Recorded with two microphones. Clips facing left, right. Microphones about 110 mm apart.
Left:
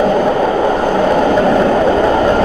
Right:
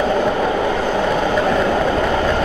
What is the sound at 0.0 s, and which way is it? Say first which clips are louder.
Vehicle: left 5 dB; 40° left (ahead or behind).